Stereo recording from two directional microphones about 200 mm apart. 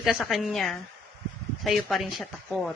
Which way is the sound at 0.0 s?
Centre (ahead or behind).